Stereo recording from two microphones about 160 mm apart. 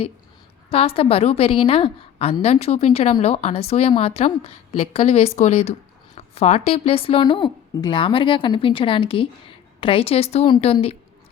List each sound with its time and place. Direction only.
0.7 s a woman's voice: 35° left (ahead or behind)